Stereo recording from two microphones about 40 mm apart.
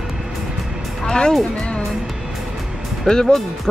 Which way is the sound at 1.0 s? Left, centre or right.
Left.